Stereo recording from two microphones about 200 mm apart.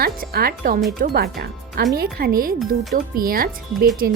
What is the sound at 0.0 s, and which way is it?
Speech, 50° right (ahead or behind).